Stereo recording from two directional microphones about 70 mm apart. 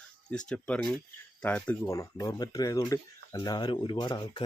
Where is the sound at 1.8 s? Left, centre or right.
Left.